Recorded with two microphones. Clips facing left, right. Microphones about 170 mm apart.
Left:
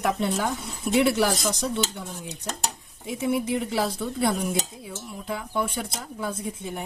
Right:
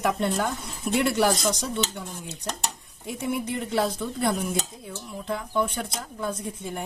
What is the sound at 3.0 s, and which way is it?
A woman's voice, centre (ahead or behind).